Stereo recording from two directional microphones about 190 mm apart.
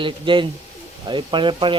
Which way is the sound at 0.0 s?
25° right (ahead or behind).